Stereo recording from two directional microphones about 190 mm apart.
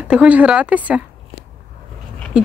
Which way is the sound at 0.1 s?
5° right (ahead or behind).